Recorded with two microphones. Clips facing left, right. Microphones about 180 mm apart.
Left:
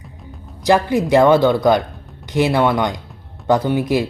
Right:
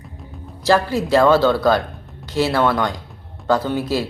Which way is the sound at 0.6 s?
15° left (ahead or behind).